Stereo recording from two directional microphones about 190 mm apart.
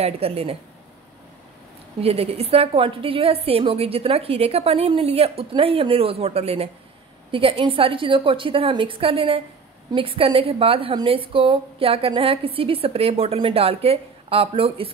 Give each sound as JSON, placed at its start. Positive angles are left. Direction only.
{"t": 0.0, "sound": "a woman's voice", "side_deg": -30}
{"t": 2.0, "sound": "a woman's voice", "side_deg": -30}